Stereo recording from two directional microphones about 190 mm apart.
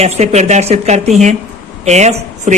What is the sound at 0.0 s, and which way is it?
A man's voice, 35° right (ahead or behind).